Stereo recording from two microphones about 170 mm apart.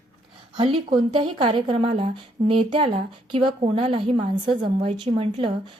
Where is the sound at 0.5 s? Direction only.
30° right (ahead or behind).